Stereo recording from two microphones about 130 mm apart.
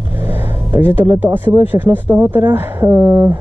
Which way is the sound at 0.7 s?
15° right (ahead or behind).